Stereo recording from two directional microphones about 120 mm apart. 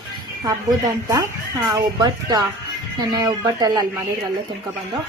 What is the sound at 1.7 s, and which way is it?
A woman's voice, 30° right (ahead or behind).